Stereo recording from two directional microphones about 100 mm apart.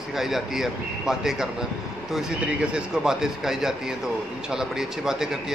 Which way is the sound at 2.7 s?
5° right (ahead or behind).